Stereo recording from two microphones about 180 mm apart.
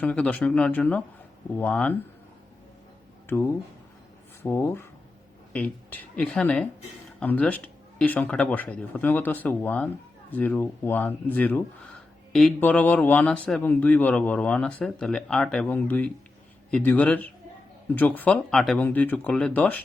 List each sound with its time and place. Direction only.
0.0 s a man's voice: 5° left (ahead or behind)
3.2 s a man's voice: 15° left (ahead or behind)